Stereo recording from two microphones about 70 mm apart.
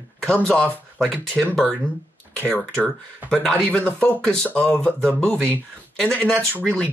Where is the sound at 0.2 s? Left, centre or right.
Centre.